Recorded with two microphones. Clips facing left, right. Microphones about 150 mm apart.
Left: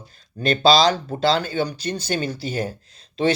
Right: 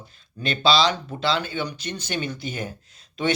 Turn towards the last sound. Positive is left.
turn(degrees=35)  # may be behind; listen again after turning